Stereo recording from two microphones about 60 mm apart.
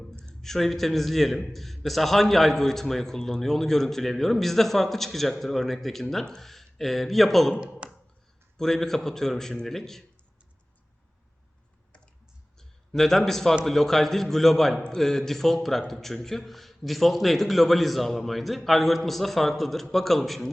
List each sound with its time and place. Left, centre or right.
0.0 s a man's voice: centre
7.5 s speech: centre
8.5 s a man's voice: centre
12.5 s a man's voice: centre